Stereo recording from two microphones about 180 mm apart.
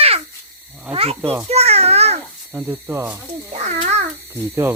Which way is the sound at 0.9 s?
30° right (ahead or behind).